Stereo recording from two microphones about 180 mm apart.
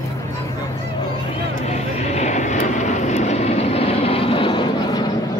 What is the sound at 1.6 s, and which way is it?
Vehicle, 40° left (ahead or behind).